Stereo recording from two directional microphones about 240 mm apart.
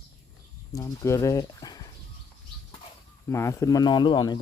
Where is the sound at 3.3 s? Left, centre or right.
Centre.